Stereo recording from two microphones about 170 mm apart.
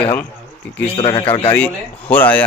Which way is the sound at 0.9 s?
30° left (ahead or behind).